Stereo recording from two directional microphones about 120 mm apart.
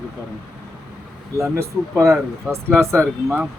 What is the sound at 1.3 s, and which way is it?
Speech, 25° right (ahead or behind).